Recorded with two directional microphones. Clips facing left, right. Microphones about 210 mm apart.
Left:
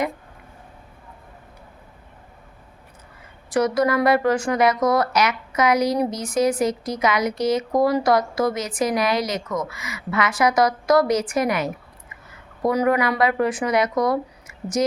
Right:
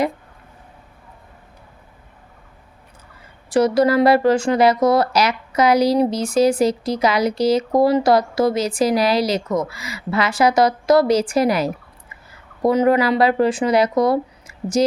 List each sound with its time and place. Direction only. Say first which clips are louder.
3.5 s speech: right 4 dB; 30° right (ahead or behind)